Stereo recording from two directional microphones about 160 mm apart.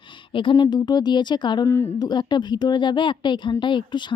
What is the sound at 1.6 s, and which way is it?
Speech, 15° left (ahead or behind).